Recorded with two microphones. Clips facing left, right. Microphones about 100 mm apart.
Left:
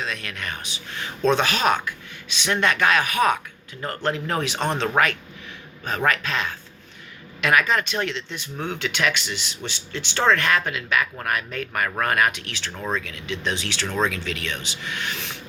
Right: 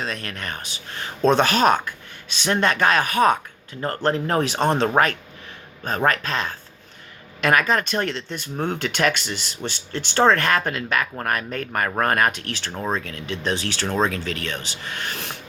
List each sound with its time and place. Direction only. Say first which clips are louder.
0.0 s speech: right 1 dB; 40° right (ahead or behind)